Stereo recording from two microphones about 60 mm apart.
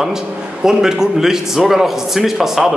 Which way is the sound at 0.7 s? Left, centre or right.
Centre.